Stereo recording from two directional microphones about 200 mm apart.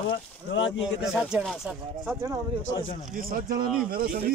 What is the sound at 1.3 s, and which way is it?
Speech, centre (ahead or behind).